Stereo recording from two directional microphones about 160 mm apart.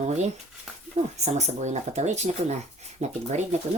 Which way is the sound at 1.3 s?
45° right (ahead or behind).